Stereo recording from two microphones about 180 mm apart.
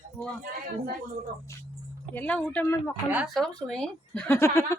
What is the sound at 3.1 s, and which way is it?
Speech, centre (ahead or behind).